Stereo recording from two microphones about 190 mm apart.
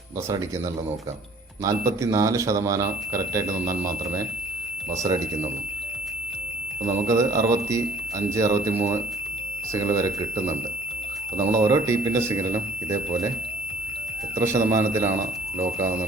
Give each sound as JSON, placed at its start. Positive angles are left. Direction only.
{"t": 1.6, "sound": "speech", "side_deg": -15}
{"t": 5.0, "sound": "speech", "side_deg": -20}
{"t": 6.8, "sound": "speech", "side_deg": -15}
{"t": 14.3, "sound": "speech", "side_deg": -15}